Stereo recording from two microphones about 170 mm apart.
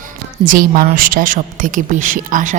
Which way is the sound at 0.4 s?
55° right (ahead or behind).